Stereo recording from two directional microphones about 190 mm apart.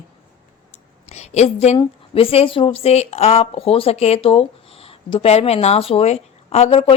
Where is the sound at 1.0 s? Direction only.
35° left (ahead or behind).